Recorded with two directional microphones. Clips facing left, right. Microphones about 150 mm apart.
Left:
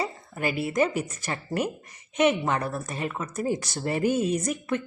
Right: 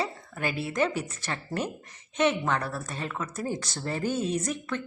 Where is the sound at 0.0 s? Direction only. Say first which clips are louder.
Left 2 dB; 5° left (ahead or behind).